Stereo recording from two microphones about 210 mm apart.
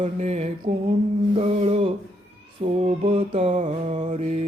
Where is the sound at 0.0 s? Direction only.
30° right (ahead or behind).